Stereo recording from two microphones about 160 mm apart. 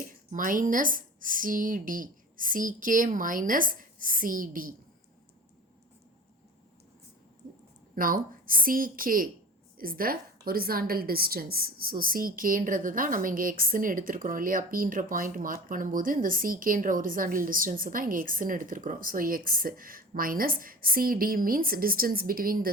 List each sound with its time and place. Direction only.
0.3 s a woman's voice: 55° right (ahead or behind)
7.9 s a woman's voice: 60° right (ahead or behind)